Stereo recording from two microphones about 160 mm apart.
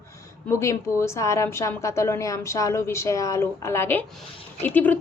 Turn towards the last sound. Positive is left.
turn(degrees=10)  # may be behind; listen again after turning